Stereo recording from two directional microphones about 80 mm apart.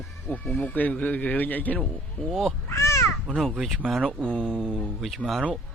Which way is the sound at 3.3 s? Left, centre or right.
Centre.